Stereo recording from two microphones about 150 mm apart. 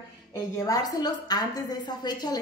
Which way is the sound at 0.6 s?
25° left (ahead or behind).